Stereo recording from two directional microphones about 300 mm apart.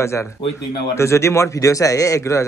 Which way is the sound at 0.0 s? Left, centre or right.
Centre.